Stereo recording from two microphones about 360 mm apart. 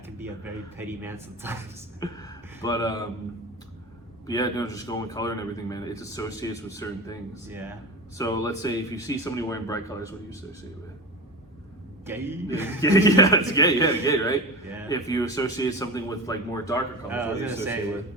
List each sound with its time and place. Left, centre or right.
0.9 s speech: centre
2.0 s a man's voice: centre
4.3 s a man's voice: centre
8.2 s a man's voice: centre
12.0 s speech: centre
12.8 s a man's voice: centre
17.1 s a man's voice: centre